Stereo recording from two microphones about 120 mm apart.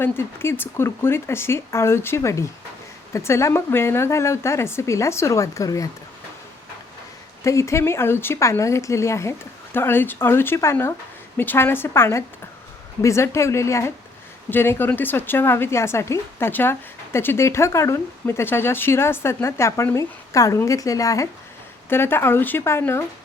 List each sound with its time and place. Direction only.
0.0 s a woman's voice: 20° left (ahead or behind)
7.4 s a woman's voice: 25° left (ahead or behind)